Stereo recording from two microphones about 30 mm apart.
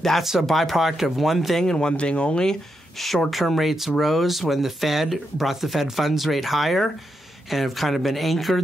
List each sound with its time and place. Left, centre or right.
0.4 s speech: centre
1.6 s speech: left
2.0 s speech: left
3.3 s speech: centre